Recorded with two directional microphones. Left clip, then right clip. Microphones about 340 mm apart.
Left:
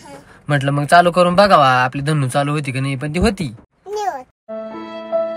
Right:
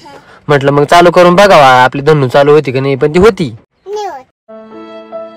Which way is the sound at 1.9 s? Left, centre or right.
Centre.